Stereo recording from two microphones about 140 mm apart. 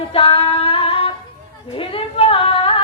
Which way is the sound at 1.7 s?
40° left (ahead or behind).